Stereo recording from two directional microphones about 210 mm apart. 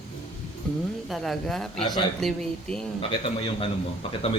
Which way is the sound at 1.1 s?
Centre (ahead or behind).